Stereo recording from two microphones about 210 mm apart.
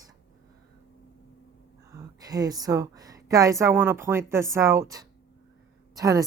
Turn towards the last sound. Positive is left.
turn(degrees=-15)  # may be behind; listen again after turning